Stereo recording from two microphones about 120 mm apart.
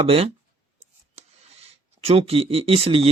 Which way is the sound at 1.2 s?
60° right (ahead or behind).